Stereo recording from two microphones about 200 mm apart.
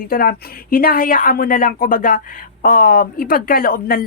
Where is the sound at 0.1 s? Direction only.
45° left (ahead or behind).